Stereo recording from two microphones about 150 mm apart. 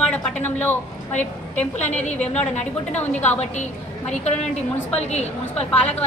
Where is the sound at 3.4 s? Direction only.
50° left (ahead or behind).